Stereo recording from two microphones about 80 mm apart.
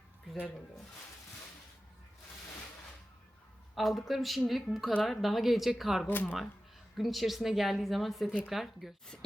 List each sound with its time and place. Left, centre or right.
3.8 s a woman's voice: centre
6.1 s speech: left
6.9 s a woman's voice: centre